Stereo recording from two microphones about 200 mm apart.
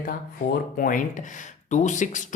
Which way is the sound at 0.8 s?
40° left (ahead or behind).